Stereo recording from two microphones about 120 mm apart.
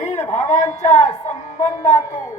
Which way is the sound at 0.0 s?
75° left (ahead or behind).